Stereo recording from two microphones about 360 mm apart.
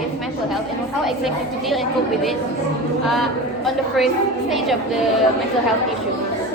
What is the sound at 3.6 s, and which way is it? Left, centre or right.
Speech, centre.